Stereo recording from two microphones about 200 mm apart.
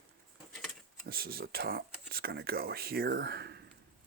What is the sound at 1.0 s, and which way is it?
Speech, 50° right (ahead or behind).